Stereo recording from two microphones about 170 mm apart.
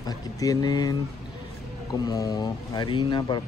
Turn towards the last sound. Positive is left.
turn(degrees=25)  # may be behind; listen again after turning